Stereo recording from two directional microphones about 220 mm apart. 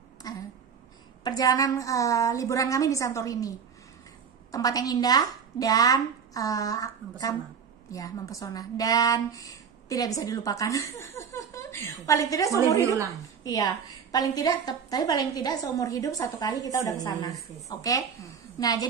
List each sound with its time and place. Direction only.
0.2 s a sound: 15° left (ahead or behind)
1.2 s a woman's voice: 15° left (ahead or behind)
12.8 s a woman's voice: 15° right (ahead or behind)
13.4 s a woman's voice: 15° left (ahead or behind)